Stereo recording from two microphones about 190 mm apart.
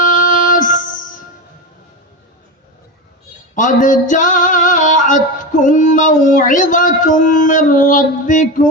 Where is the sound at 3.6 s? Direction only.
45° left (ahead or behind).